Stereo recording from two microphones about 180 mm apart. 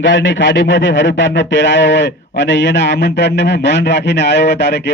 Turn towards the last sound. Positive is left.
turn(degrees=75)  # may be behind; listen again after turning